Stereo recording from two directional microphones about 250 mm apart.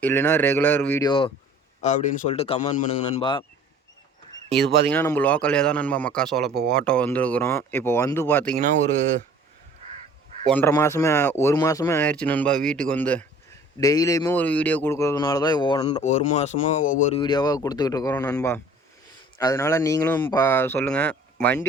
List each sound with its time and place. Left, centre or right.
0.0 s speech: centre
1.8 s a man's voice: left
4.9 s a man's voice: centre
6.5 s speech: right
6.7 s speech: centre
10.4 s speech: centre
16.0 s a man's voice: left
17.2 s speech: centre